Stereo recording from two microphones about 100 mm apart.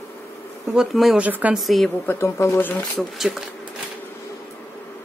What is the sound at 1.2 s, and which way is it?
Speech, 15° right (ahead or behind).